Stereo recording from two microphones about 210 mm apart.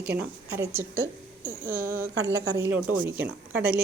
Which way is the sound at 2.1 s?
55° right (ahead or behind).